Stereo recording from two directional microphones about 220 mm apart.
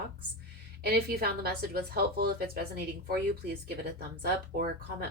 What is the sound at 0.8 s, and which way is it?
A woman's voice, 45° right (ahead or behind).